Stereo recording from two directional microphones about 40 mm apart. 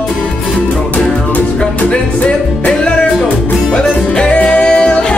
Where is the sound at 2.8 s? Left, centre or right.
Left.